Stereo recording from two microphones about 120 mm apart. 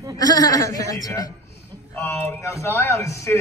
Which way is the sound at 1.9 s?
20° left (ahead or behind).